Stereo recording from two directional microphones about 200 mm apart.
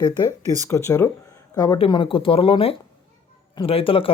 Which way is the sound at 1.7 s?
25° left (ahead or behind).